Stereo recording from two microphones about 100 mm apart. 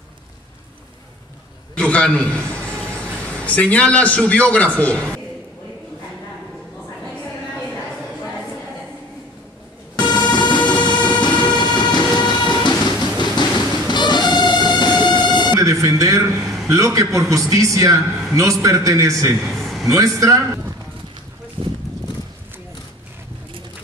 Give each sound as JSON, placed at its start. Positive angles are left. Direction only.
{"t": 1.8, "sound": "a man's voice", "side_deg": 10}
{"t": 9.9, "sound": "music", "side_deg": 45}
{"t": 10.7, "sound": "train", "side_deg": 50}
{"t": 11.7, "sound": "vehicle", "side_deg": 50}
{"t": 13.2, "sound": "music", "side_deg": 45}
{"t": 15.6, "sound": "music", "side_deg": -35}
{"t": 16.3, "sound": "a sound", "side_deg": 0}
{"t": 16.7, "sound": "a man's voice", "side_deg": -35}
{"t": 18.0, "sound": "a man's voice", "side_deg": -5}
{"t": 18.4, "sound": "a man's voice", "side_deg": -35}
{"t": 19.3, "sound": "a sound", "side_deg": 0}
{"t": 20.2, "sound": "a man's voice", "side_deg": -30}